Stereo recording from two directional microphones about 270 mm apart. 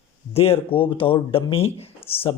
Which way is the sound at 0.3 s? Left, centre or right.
Left.